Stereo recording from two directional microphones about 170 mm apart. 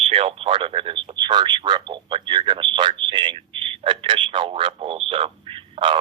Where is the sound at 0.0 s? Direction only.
35° right (ahead or behind).